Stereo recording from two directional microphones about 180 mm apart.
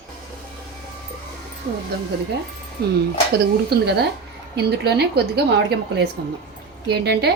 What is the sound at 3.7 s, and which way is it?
A woman's voice, 65° right (ahead or behind).